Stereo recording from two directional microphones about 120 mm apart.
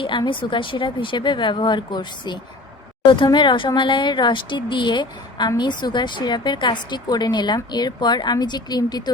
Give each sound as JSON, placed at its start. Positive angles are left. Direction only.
{"t": 0.0, "sound": "a woman's voice", "side_deg": 45}